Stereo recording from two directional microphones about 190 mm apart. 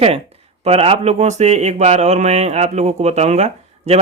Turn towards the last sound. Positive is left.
turn(degrees=-35)  # may be behind; listen again after turning